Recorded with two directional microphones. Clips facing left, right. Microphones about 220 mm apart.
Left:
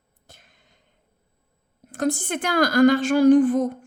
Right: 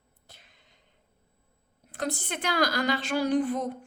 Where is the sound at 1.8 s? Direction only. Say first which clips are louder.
Left 8 dB; 45° left (ahead or behind).